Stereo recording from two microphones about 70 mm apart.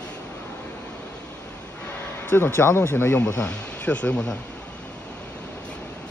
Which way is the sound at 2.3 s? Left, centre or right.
Left.